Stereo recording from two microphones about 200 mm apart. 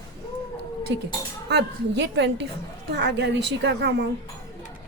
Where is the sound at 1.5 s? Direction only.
60° right (ahead or behind).